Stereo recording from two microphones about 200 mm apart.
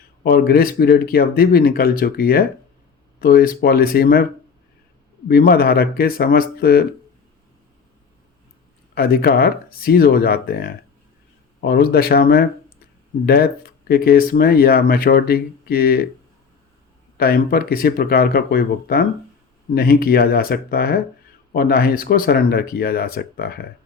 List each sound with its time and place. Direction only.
0.2 s speech: 50° left (ahead or behind)
5.3 s speech: 50° left (ahead or behind)
9.0 s speech: 50° left (ahead or behind)
17.2 s speech: 50° left (ahead or behind)